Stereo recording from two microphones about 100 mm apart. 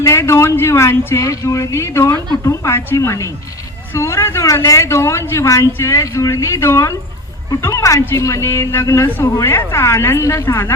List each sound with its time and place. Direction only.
0.0 s speech: 30° left (ahead or behind)